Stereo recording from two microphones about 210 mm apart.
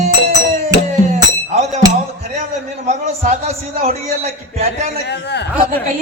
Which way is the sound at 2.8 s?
30° right (ahead or behind).